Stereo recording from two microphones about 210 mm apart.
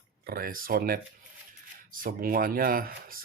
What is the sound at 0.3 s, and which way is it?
Speech, 45° right (ahead or behind).